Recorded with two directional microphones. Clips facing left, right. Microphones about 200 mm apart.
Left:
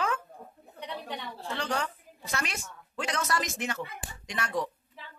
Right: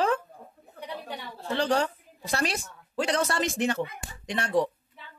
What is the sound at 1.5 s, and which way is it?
A woman's voice, 30° right (ahead or behind).